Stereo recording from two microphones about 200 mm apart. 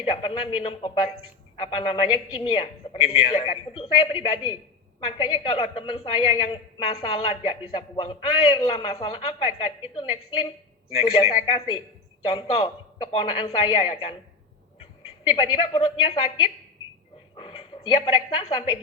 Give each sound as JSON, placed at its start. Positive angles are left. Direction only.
{"t": 0.0, "sound": "a woman's voice", "side_deg": 30}